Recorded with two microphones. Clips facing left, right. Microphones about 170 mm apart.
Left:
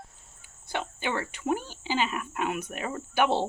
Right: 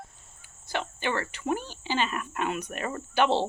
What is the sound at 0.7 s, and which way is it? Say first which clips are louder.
Speech: right 1 dB; 15° left (ahead or behind).